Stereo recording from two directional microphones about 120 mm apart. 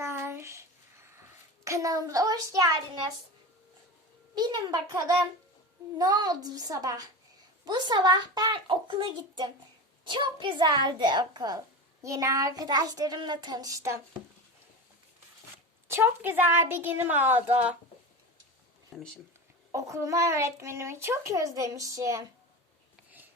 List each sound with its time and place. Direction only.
0.0 s a sound: 20° right (ahead or behind)
1.6 s speech: 25° right (ahead or behind)
4.4 s speech: 35° right (ahead or behind)
15.9 s speech: 20° right (ahead or behind)
18.9 s speech: centre (ahead or behind)
19.7 s speech: 25° right (ahead or behind)